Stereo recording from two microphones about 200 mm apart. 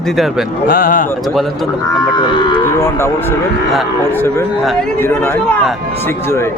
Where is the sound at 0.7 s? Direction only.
45° left (ahead or behind).